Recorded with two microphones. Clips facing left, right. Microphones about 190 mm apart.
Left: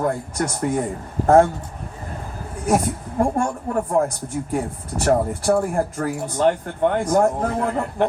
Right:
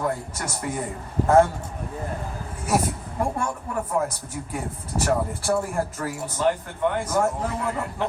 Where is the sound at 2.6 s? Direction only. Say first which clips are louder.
Left 4 dB; 50° left (ahead or behind).